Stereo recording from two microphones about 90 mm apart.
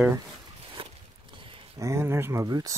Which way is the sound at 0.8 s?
85° right.